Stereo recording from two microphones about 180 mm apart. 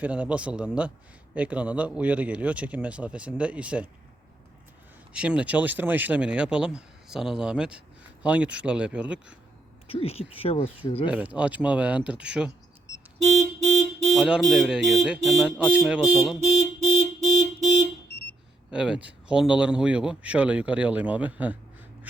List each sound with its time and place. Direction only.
0.0 s speech: 5° right (ahead or behind)
5.1 s speech: 5° right (ahead or behind)
9.8 s speech: 30° left (ahead or behind)
11.1 s speech: 5° right (ahead or behind)
14.1 s speech: 5° right (ahead or behind)
18.7 s speech: 5° right (ahead or behind)